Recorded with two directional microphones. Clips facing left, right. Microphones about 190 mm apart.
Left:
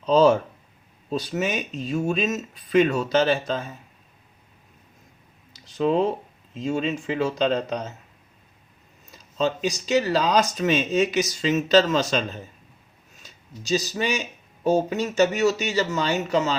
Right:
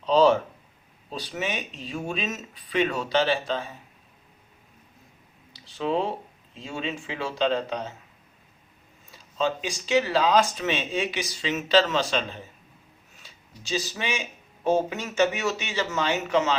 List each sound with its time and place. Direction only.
0.0 s speech: 45° left (ahead or behind)
5.5 s a sound: 40° left (ahead or behind)
6.5 s speech: 40° left (ahead or behind)
9.1 s speech: 40° left (ahead or behind)
13.6 s speech: 40° left (ahead or behind)